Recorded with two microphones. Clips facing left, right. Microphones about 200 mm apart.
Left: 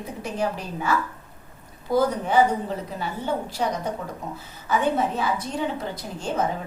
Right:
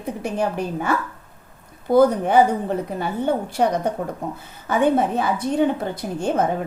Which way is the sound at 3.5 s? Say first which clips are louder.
Right 6 dB; 55° right (ahead or behind).